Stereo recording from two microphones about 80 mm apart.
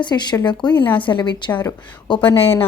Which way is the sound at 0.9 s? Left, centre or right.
Left.